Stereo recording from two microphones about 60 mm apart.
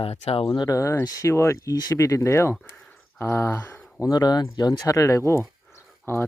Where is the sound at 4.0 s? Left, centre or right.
Left.